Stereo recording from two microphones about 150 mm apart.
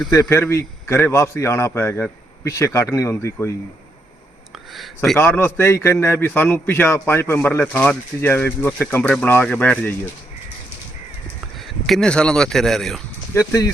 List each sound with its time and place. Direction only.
0.1 s a man's voice: 20° left (ahead or behind)
5.1 s a man's voice: 15° left (ahead or behind)
11.9 s speech: 5° left (ahead or behind)